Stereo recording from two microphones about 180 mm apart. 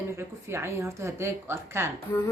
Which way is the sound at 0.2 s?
15° right (ahead or behind).